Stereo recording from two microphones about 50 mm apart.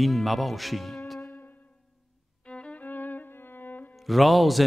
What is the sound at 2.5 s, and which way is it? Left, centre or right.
Violin, left.